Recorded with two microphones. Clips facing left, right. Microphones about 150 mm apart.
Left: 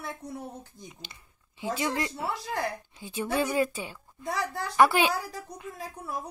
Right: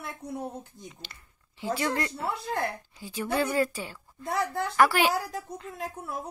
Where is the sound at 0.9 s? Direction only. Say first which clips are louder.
Even; 15° left (ahead or behind).